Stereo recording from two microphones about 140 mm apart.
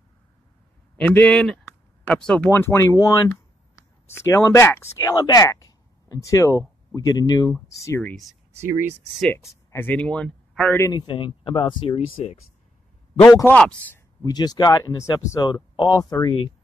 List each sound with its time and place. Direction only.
0.9 s speech: 10° left (ahead or behind)
8.0 s speech: 5° left (ahead or behind)
8.6 s speech: 15° right (ahead or behind)
9.3 s speech: 20° left (ahead or behind)
10.8 s speech: 30° left (ahead or behind)
13.2 s speech: 20° left (ahead or behind)
14.2 s speech: 30° left (ahead or behind)
15.7 s speech: 40° left (ahead or behind)
16.0 s speech: 25° left (ahead or behind)